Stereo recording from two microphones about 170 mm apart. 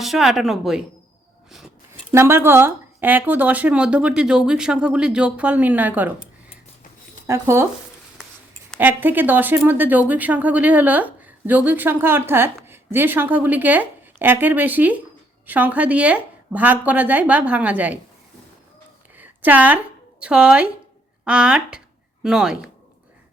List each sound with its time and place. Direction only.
0.0 s speech: centre (ahead or behind)
1.5 s a sound: centre (ahead or behind)
2.1 s speech: 15° right (ahead or behind)
7.3 s speech: 15° right (ahead or behind)
8.8 s speech: 10° right (ahead or behind)
19.1 s a sound: 10° right (ahead or behind)
21.2 s speech: 5° right (ahead or behind)